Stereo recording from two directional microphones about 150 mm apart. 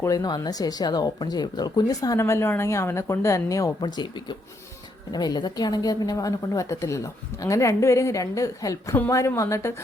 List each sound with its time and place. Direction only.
0.0 s speech: 25° left (ahead or behind)